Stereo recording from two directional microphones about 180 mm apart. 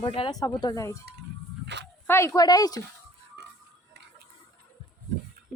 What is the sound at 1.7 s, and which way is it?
Speech, 70° right (ahead or behind).